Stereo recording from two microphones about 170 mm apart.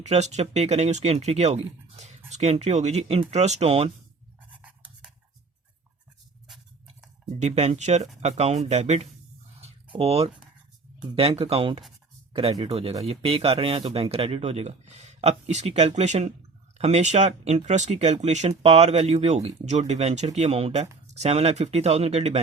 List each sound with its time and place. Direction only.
0.0 s speech: 40° right (ahead or behind)
4.5 s a sound: 10° right (ahead or behind)
6.5 s tick-tock: 5° right (ahead or behind)
7.3 s speech: 40° right (ahead or behind)
9.6 s a sound: 35° right (ahead or behind)
11.1 s speech: 35° right (ahead or behind)